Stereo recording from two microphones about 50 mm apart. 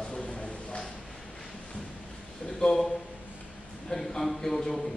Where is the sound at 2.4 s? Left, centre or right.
Centre.